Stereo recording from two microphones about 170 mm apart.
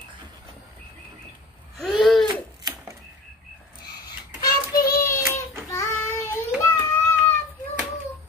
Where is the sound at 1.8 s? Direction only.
Centre (ahead or behind).